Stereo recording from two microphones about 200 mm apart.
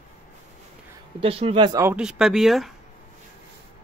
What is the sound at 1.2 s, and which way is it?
Speech, 30° right (ahead or behind).